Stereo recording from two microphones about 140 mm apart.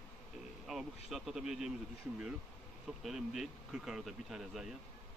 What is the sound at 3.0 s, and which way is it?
Speech, centre (ahead or behind).